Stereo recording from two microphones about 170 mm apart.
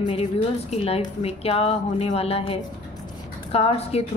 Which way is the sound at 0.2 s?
40° left (ahead or behind).